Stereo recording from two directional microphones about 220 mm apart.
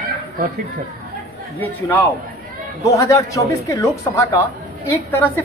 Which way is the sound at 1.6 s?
10° left (ahead or behind).